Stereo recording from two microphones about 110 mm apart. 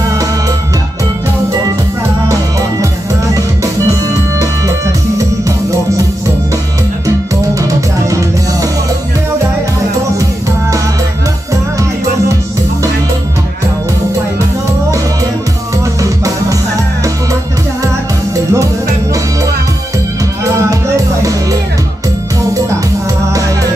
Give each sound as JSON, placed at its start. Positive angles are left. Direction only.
{"t": 4.4, "sound": "music", "side_deg": -30}
{"t": 8.1, "sound": "music", "side_deg": -30}
{"t": 18.3, "sound": "music", "side_deg": -30}
{"t": 21.2, "sound": "music", "side_deg": -30}